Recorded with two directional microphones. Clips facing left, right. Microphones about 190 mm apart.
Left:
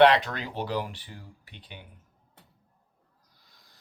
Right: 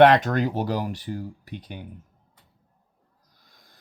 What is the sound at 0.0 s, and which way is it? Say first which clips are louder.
Speech: right 4 dB; 45° right (ahead or behind).